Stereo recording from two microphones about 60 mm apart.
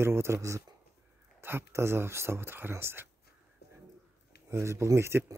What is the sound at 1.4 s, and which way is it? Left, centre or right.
Speech, right.